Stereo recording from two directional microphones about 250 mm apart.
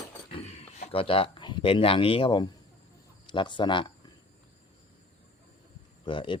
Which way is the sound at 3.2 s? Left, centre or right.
Centre.